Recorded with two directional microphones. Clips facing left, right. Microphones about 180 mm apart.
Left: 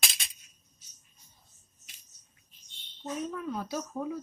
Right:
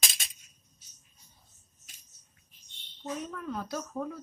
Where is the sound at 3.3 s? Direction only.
10° left (ahead or behind).